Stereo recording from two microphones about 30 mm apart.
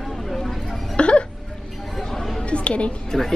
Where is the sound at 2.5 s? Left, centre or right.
Left.